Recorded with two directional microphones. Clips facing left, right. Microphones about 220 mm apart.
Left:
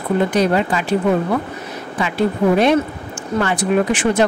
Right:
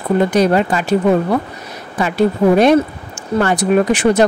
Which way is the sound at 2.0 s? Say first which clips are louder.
Right 4 dB; 40° right (ahead or behind).